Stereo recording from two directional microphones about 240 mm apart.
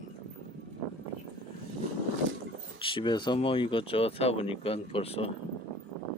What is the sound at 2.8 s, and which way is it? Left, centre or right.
Speech, centre.